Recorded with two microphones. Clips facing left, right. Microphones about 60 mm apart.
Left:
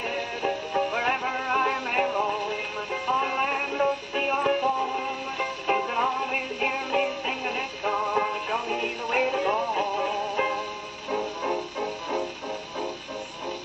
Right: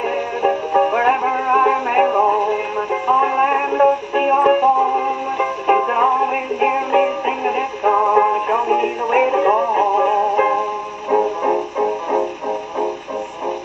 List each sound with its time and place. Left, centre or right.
0.0 s music: right
0.5 s music: right
0.9 s music: right
2.0 s music: right
2.3 s music: right
9.7 s music: right
9.9 s music: right
10.3 s music: right
11.1 s music: right
12.4 s music: centre